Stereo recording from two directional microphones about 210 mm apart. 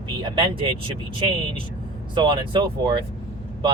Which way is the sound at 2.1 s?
20° right (ahead or behind).